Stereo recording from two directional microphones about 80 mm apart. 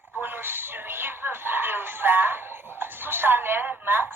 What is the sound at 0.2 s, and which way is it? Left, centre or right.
Speech, right.